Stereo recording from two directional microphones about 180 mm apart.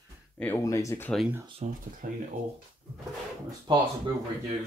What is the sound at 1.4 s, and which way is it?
Speech, 30° right (ahead or behind).